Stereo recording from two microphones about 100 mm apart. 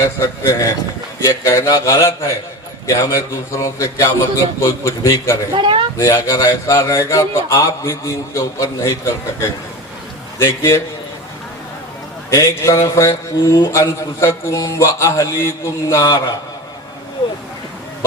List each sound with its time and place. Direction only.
0.0 s a man's voice: 30° left (ahead or behind)
5.5 s speech: 60° right (ahead or behind)
6.0 s a man's voice: 30° left (ahead or behind)
12.3 s a man's voice: 35° left (ahead or behind)